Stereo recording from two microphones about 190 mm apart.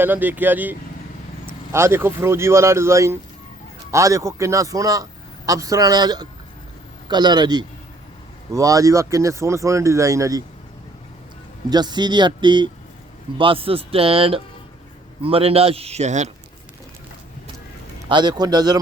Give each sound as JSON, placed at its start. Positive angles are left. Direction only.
{"t": 0.0, "sound": "a man's voice", "side_deg": -10}
{"t": 11.7, "sound": "a man's voice", "side_deg": -20}
{"t": 18.1, "sound": "a man's voice", "side_deg": -25}